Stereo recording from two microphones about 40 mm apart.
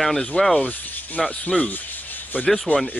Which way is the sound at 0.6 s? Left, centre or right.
Left.